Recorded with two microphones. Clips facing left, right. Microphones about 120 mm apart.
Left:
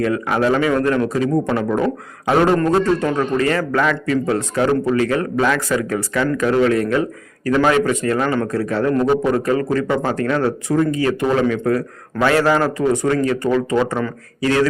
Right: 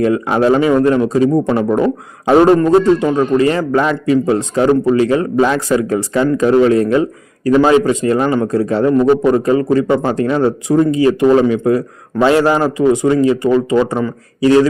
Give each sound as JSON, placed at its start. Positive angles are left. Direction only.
{"t": 0.0, "sound": "a man's voice", "side_deg": -30}